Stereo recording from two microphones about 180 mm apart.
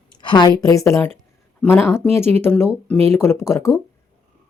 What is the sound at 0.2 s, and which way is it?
Speech, 25° left (ahead or behind).